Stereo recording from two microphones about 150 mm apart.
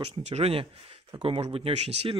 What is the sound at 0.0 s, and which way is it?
Speech, 45° right (ahead or behind).